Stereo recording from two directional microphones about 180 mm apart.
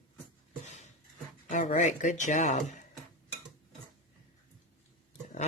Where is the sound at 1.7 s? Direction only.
40° left (ahead or behind).